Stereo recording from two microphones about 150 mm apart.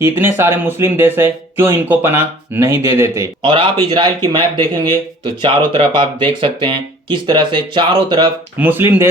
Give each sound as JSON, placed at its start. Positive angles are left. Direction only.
{"t": 0.0, "sound": "speech", "side_deg": -15}
{"t": 3.4, "sound": "speech", "side_deg": -30}
{"t": 8.5, "sound": "speech", "side_deg": -10}